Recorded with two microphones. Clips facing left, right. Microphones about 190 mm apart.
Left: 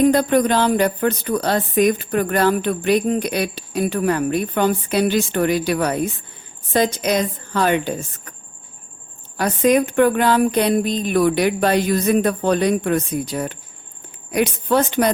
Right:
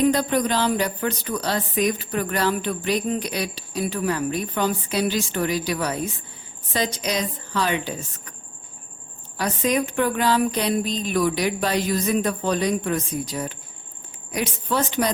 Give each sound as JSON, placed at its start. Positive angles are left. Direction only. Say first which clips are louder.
{"t": 0.0, "sound": "a woman's voice", "louder": "left 5 dB", "side_deg": 55}
{"t": 9.4, "sound": "speech", "louder": "left 6 dB", "side_deg": 55}